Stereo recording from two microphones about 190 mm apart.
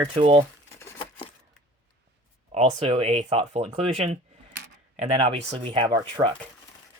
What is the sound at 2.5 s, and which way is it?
Speech, 30° right (ahead or behind).